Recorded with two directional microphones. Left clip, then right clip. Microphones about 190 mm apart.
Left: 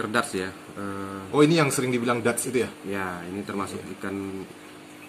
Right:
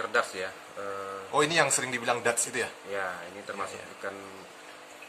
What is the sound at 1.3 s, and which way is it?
Speech, 15° right (ahead or behind).